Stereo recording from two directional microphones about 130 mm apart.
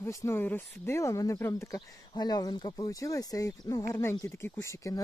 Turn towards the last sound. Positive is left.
turn(degrees=20)  # may be behind; listen again after turning